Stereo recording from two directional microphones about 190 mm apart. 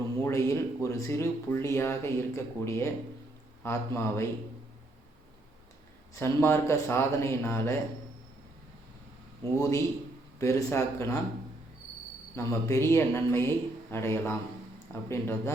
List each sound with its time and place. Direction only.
0.2 s speech: 15° left (ahead or behind)
6.1 s speech: 15° left (ahead or behind)
9.6 s speech: 15° left (ahead or behind)
12.4 s speech: 15° left (ahead or behind)